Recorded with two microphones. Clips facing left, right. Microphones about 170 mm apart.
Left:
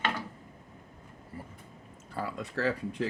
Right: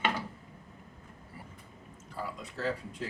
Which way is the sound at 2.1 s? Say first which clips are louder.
Left 4 dB; 70° left (ahead or behind).